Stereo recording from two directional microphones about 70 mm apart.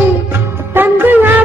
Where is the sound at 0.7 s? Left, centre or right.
Right.